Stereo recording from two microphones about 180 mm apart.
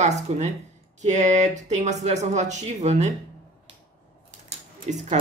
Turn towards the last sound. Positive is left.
turn(degrees=-40)  # may be behind; listen again after turning